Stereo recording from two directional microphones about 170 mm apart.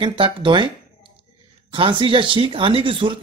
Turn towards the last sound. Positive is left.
turn(degrees=-30)  # may be behind; listen again after turning